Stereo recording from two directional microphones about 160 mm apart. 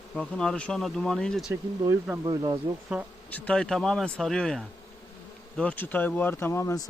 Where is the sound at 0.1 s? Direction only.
5° left (ahead or behind).